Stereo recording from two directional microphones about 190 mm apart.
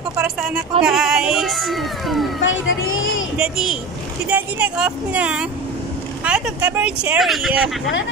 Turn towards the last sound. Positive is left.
turn(degrees=0)  # may be behind; listen again after turning